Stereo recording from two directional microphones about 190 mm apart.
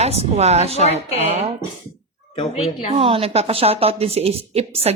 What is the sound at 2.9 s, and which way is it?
A woman's voice, 30° right (ahead or behind).